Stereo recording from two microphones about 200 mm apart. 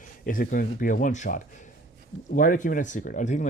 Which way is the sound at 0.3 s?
45° left (ahead or behind).